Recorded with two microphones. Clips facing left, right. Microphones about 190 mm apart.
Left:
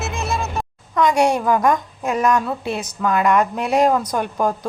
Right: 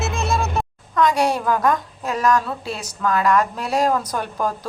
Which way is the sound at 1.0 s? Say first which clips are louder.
Left 2 dB; 15° left (ahead or behind).